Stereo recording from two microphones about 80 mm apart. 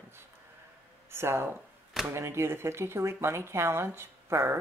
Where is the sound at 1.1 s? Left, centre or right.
Right.